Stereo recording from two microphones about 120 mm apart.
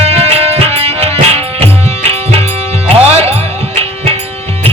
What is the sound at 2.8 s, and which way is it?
Music, 55° right (ahead or behind).